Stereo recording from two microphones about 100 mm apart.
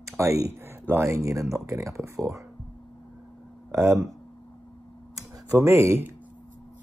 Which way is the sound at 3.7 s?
25° right (ahead or behind).